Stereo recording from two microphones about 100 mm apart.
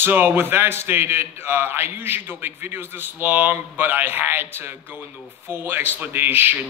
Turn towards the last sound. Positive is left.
turn(degrees=-20)  # may be behind; listen again after turning